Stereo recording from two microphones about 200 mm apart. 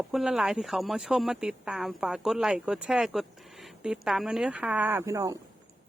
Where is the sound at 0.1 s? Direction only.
Centre (ahead or behind).